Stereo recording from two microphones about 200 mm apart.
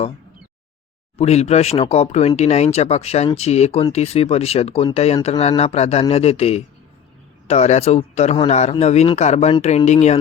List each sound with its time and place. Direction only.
1.2 s speech: 30° left (ahead or behind)